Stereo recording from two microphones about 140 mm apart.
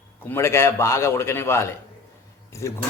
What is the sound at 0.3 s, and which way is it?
A man's voice, 20° left (ahead or behind).